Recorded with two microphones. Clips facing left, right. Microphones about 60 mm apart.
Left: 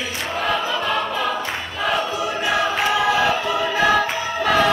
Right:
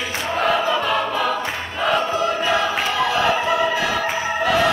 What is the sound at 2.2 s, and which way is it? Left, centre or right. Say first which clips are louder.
Choir: right 1 dB; centre.